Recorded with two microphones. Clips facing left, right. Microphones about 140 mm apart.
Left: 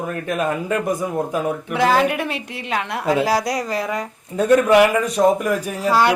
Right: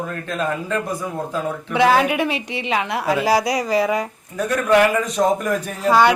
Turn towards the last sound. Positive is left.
turn(degrees=5)  # may be behind; listen again after turning